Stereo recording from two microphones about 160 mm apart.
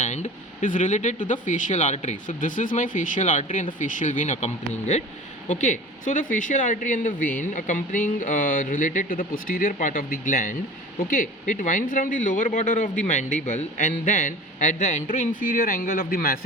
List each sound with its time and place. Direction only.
0.0 s speech: 50° left (ahead or behind); by 16.4 s 65° left (ahead or behind)